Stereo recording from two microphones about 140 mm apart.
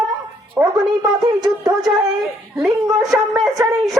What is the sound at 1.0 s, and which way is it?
Speech, 30° right (ahead or behind).